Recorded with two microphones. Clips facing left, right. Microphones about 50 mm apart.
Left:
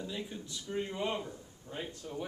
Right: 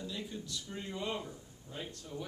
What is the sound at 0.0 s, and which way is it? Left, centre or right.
Speech, centre.